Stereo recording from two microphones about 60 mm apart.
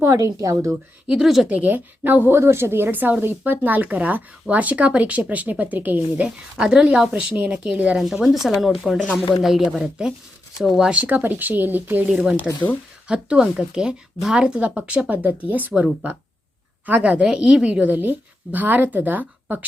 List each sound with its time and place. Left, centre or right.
0.1 s a woman's voice: right
1.1 s speech: centre
1.5 s a woman's voice: right
6.2 s speech: centre
7.9 s speech: centre
10.9 s speech: right
12.0 s a woman's voice: centre
16.8 s a woman's voice: right
17.9 s a woman's voice: right